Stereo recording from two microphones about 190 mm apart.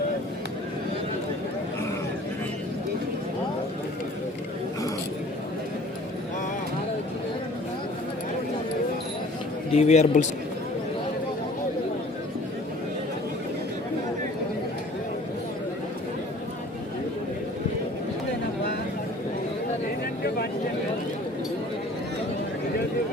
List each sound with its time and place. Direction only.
9.7 s a man's voice: 35° left (ahead or behind)